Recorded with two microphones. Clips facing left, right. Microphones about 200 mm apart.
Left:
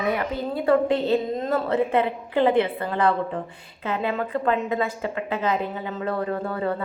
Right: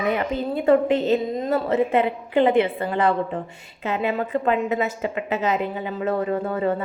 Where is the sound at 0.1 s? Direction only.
20° right (ahead or behind).